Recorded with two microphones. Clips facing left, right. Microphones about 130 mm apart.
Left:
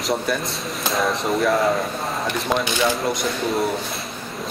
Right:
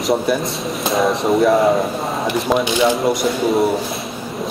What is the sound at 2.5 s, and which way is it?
Speech, centre (ahead or behind).